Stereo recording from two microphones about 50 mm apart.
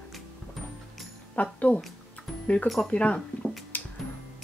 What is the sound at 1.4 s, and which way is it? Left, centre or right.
Speech, left.